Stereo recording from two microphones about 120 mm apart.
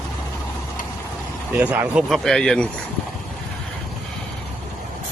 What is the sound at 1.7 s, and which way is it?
Speech, 15° right (ahead or behind).